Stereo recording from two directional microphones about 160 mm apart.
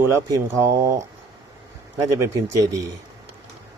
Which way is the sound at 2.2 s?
20° right (ahead or behind).